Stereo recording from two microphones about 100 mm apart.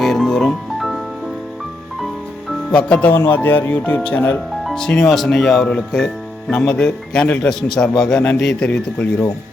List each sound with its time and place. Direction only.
0.0 s music: centre (ahead or behind)
2.5 s speech: 10° left (ahead or behind)